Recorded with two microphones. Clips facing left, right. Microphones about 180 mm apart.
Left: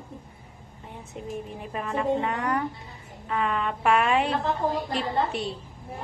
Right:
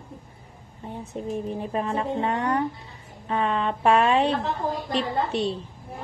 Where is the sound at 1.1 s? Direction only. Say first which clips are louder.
Right 6 dB; 35° right (ahead or behind).